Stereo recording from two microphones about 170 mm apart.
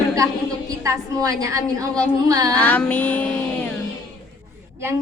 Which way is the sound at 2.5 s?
10° left (ahead or behind).